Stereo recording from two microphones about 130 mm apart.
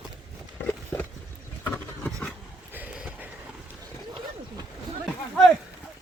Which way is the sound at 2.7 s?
10° right (ahead or behind).